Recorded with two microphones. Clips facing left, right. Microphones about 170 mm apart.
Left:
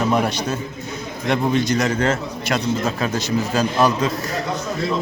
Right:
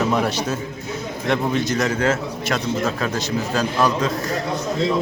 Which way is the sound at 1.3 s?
Centre (ahead or behind).